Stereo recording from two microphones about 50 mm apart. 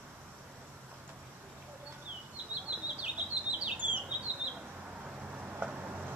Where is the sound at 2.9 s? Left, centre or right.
Right.